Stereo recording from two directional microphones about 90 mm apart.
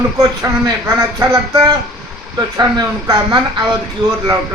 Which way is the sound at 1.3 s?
45° right (ahead or behind).